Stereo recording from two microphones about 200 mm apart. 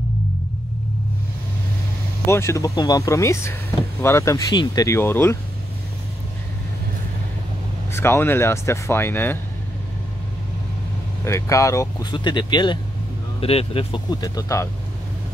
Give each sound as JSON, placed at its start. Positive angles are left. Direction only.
{"t": 2.2, "sound": "speech", "side_deg": 15}
{"t": 7.9, "sound": "speech", "side_deg": 10}
{"t": 11.2, "sound": "speech", "side_deg": 15}